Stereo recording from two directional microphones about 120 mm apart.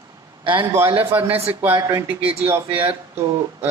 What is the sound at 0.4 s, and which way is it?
Speech, 40° right (ahead or behind).